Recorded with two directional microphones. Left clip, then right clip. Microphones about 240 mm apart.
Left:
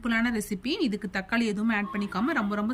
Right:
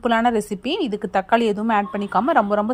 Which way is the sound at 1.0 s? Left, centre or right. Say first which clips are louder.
Right 11 dB; right.